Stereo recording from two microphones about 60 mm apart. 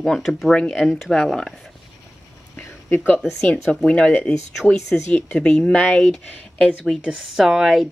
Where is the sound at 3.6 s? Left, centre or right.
Centre.